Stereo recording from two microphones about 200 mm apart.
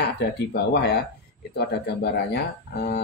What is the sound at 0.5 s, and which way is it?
Speech, 55° left (ahead or behind).